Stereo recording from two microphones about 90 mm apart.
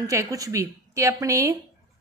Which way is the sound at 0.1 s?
40° right (ahead or behind).